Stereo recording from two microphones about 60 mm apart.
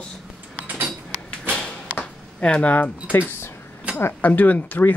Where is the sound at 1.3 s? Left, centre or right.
Centre.